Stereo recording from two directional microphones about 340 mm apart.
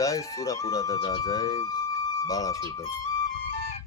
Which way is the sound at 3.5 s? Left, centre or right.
Centre.